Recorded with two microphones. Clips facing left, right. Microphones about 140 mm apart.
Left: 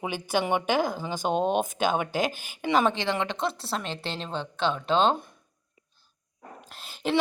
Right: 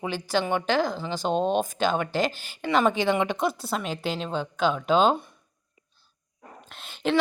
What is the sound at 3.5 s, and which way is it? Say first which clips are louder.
Speech: right 3 dB; 30° left (ahead or behind).